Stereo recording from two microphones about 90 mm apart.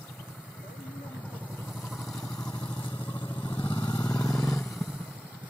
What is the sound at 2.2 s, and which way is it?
Vehicle, 45° left (ahead or behind).